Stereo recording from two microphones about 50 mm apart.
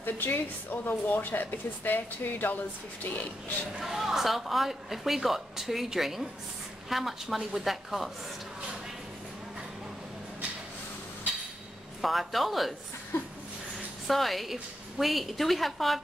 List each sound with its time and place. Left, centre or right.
0.0 s speech: left
3.8 s a woman's voice: centre
12.0 s a woman's voice: centre
14.0 s a woman's voice: centre